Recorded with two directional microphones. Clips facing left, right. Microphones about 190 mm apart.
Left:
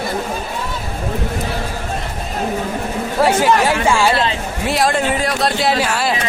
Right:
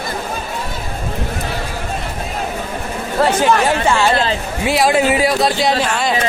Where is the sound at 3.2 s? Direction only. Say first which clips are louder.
Even; 10° left (ahead or behind).